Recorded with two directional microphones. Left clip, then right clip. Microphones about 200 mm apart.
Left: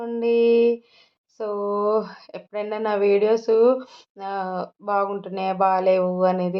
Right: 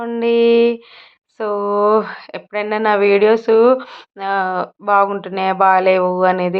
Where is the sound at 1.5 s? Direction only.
40° right (ahead or behind).